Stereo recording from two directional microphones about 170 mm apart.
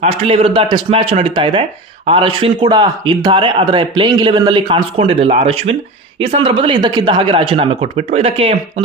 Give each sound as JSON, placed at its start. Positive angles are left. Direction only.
{"t": 0.0, "sound": "speech", "side_deg": -35}